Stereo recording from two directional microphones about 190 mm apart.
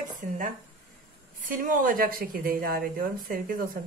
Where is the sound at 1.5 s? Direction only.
45° right (ahead or behind).